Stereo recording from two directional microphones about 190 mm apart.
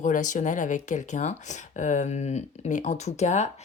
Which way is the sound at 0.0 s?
40° left (ahead or behind).